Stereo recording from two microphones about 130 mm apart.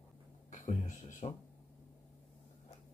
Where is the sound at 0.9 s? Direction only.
70° left (ahead or behind).